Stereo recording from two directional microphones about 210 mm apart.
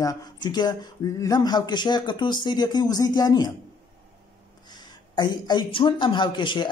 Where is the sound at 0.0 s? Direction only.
20° left (ahead or behind).